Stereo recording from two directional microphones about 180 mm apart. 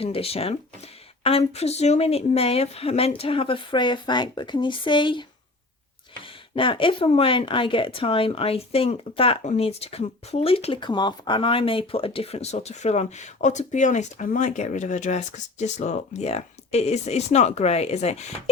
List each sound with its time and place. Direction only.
0.0 s speech: 35° left (ahead or behind)
6.2 s speech: 30° left (ahead or behind)